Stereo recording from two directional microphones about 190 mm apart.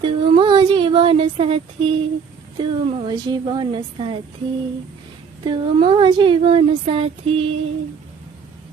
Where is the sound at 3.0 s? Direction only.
25° right (ahead or behind).